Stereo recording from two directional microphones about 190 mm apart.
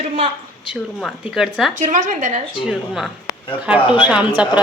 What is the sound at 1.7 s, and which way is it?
Speech, 40° right (ahead or behind).